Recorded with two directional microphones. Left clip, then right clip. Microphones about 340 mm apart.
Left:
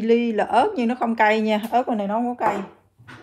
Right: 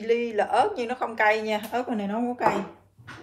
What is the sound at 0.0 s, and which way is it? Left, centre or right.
A woman's voice, left.